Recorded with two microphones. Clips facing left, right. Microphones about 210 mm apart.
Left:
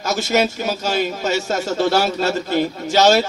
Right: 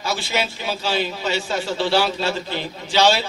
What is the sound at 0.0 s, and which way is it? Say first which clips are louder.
A man's voice: left 6 dB; 45° left (ahead or behind).